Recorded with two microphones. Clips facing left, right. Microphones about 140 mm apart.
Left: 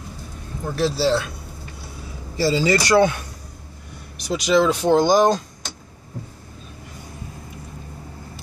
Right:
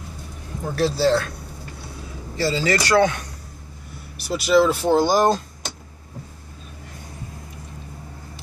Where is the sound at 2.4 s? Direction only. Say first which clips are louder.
Left 3 dB; 15° left (ahead or behind).